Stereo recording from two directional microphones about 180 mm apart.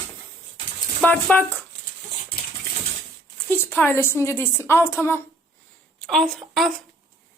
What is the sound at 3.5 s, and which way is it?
A woman's voice, 10° left (ahead or behind).